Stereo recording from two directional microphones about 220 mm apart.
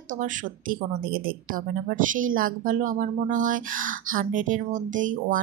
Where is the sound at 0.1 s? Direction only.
35° right (ahead or behind).